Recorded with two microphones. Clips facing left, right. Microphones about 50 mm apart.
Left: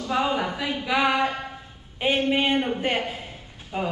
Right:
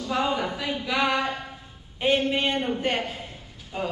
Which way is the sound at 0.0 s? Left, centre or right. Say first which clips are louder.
Left 1 dB; centre.